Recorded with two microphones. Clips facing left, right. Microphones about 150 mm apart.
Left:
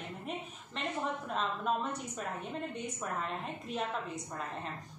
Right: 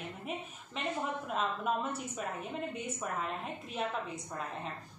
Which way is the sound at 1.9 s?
5° right (ahead or behind).